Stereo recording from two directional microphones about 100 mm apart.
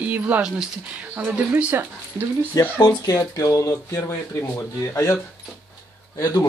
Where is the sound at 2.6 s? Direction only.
40° left (ahead or behind).